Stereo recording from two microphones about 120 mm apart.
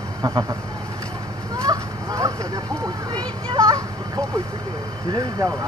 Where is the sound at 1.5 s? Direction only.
30° right (ahead or behind).